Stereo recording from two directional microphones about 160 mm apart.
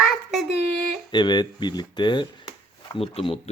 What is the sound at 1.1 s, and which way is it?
Speech, 25° left (ahead or behind).